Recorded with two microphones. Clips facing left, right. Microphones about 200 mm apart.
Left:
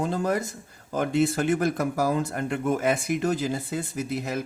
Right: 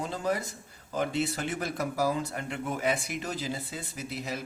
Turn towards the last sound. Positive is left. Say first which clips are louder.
# left 7 dB
turn(degrees=50)  # may be behind; listen again after turning